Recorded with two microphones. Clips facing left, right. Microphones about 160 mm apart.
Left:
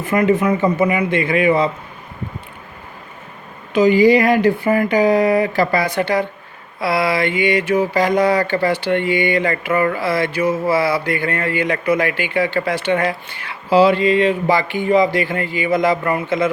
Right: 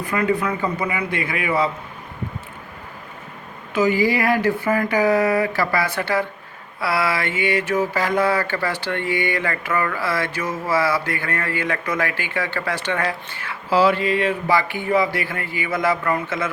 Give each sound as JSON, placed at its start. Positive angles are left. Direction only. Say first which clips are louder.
{"t": 0.0, "sound": "speech", "louder": "left 5 dB", "side_deg": 20}
{"t": 3.7, "sound": "speech", "louder": "left 7 dB", "side_deg": 15}
{"t": 4.9, "sound": "mantra", "louder": "left 3 dB", "side_deg": 15}
{"t": 12.6, "sound": "speech", "louder": "left 5 dB", "side_deg": 15}